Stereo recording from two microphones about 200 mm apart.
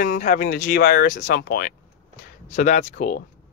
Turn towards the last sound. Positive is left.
turn(degrees=40)  # may be behind; listen again after turning